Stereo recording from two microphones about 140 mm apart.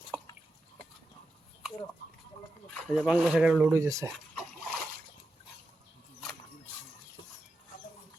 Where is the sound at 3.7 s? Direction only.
20° right (ahead or behind).